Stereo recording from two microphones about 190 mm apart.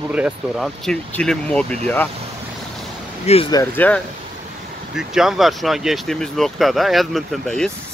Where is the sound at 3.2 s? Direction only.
30° left (ahead or behind).